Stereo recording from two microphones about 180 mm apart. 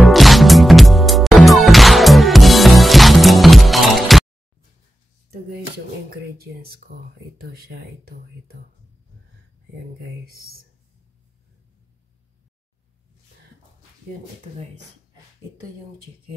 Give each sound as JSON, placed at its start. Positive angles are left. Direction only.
{"t": 0.0, "sound": "music", "side_deg": 0}
{"t": 6.4, "sound": "speech", "side_deg": -60}
{"t": 10.2, "sound": "speech", "side_deg": -60}